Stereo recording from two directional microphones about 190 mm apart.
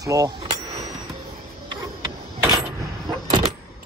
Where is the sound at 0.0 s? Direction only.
15° right (ahead or behind).